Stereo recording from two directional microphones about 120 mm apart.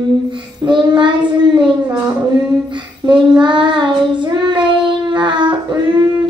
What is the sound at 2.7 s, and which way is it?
Child singing, 40° right (ahead or behind).